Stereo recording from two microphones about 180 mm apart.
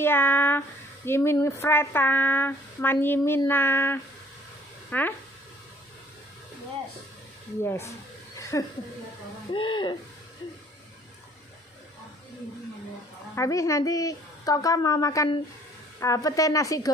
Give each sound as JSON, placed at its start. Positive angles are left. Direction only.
{"t": 0.0, "sound": "speech", "side_deg": 10}
{"t": 7.6, "sound": "speech", "side_deg": 15}
{"t": 8.4, "sound": "a sound", "side_deg": 15}
{"t": 9.5, "sound": "a woman's voice", "side_deg": 25}
{"t": 13.3, "sound": "a woman's voice", "side_deg": 15}